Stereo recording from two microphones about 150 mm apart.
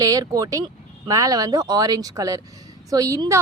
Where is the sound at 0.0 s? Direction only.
25° right (ahead or behind).